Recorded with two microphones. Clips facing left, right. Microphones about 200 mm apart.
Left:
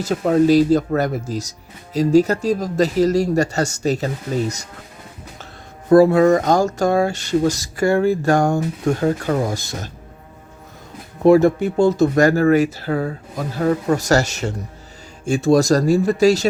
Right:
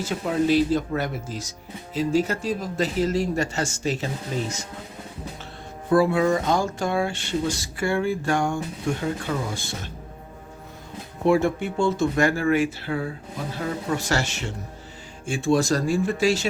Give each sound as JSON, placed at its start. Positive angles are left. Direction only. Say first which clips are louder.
{"t": 0.0, "sound": "speech", "louder": "left 8 dB", "side_deg": 40}
{"t": 5.9, "sound": "speech", "louder": "left 8 dB", "side_deg": 40}
{"t": 11.2, "sound": "speech", "louder": "left 8 dB", "side_deg": 40}